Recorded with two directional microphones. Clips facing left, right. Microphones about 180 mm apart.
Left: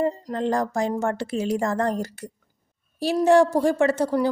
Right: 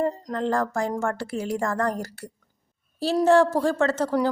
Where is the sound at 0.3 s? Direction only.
20° left (ahead or behind).